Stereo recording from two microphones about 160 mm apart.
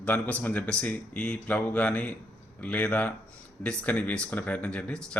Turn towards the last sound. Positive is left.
turn(degrees=5)  # may be behind; listen again after turning